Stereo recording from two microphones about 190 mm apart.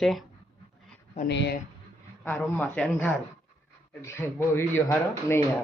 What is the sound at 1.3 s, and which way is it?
Speech, 65° left (ahead or behind).